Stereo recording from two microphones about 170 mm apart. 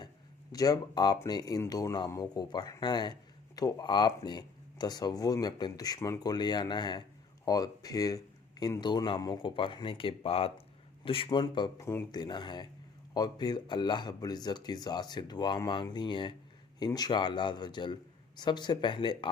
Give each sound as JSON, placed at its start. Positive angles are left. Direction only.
{"t": 0.5, "sound": "speech", "side_deg": 20}